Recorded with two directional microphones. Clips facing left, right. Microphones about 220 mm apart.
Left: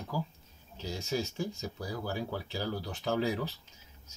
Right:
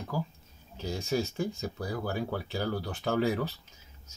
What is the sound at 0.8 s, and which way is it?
Speech, 55° right (ahead or behind).